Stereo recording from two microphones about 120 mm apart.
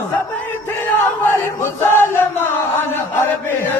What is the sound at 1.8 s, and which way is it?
Music, 20° left (ahead or behind).